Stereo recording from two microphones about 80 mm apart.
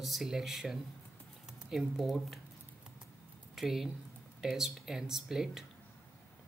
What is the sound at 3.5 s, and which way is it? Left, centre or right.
Speech, centre.